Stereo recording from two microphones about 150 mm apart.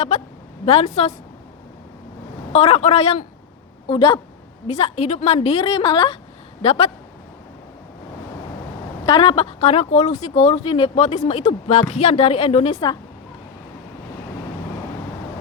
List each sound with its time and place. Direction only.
0.6 s a man's voice: 40° left (ahead or behind)
2.5 s a man's voice: 45° left (ahead or behind)
3.8 s speech: 35° left (ahead or behind)
4.6 s speech: 45° left (ahead or behind)
9.0 s speech: 35° left (ahead or behind)